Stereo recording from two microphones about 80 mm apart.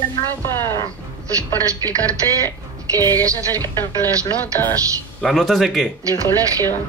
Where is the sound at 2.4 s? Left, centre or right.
Right.